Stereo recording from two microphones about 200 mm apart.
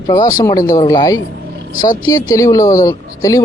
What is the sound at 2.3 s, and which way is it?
Speech, 15° left (ahead or behind).